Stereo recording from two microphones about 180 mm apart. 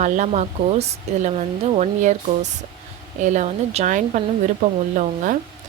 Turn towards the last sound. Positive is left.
turn(degrees=-45)  # may be behind; listen again after turning